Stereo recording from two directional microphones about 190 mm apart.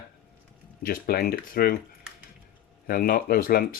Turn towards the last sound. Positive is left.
turn(degrees=50)  # may be behind; listen again after turning